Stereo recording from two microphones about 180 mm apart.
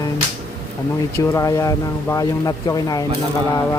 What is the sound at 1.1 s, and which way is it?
Speech, 15° left (ahead or behind).